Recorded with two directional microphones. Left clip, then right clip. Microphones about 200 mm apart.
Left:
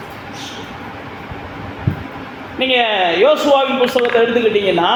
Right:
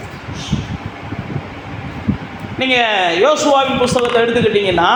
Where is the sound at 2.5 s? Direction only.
25° right (ahead or behind).